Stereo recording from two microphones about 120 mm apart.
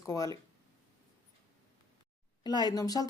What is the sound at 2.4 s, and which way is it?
Speech, 35° left (ahead or behind).